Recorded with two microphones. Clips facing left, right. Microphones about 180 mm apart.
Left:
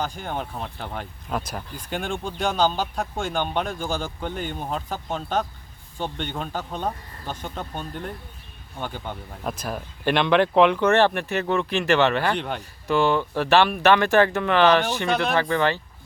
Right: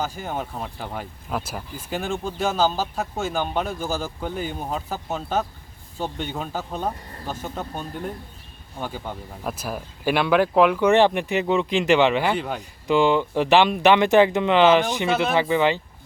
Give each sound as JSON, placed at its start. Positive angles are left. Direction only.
{"t": 0.0, "sound": "speech", "side_deg": -5}
{"t": 12.9, "sound": "speech", "side_deg": -15}
{"t": 15.0, "sound": "speech", "side_deg": -5}
{"t": 15.4, "sound": "speech", "side_deg": -15}